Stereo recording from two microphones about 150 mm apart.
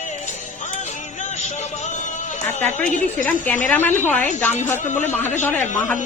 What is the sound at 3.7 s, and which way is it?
A man's voice, 15° left (ahead or behind).